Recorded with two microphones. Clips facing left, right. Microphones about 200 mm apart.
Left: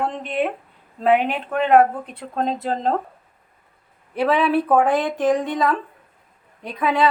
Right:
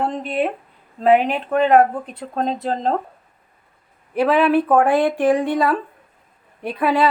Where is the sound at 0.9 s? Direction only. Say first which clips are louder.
Right 3 dB; centre (ahead or behind).